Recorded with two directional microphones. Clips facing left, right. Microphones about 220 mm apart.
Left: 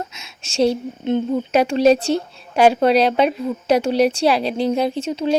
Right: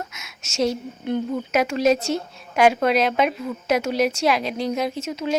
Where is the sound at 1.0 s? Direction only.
25° left (ahead or behind).